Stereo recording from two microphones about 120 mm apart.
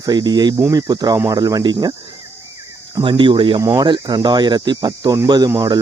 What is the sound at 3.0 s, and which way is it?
Speech, 45° right (ahead or behind).